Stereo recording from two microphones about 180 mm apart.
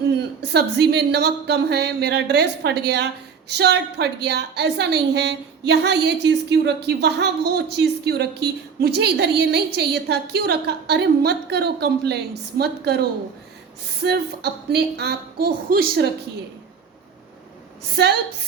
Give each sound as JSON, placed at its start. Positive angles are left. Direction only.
{"t": 0.1, "sound": "a woman's voice", "side_deg": -65}
{"t": 17.9, "sound": "a woman's voice", "side_deg": -65}